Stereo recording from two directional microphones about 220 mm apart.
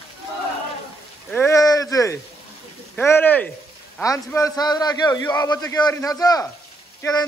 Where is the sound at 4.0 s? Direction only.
15° left (ahead or behind).